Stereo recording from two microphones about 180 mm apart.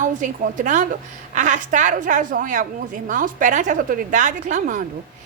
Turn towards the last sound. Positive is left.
turn(degrees=-45)  # may be behind; listen again after turning